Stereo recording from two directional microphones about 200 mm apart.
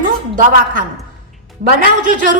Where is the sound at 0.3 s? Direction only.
45° right (ahead or behind).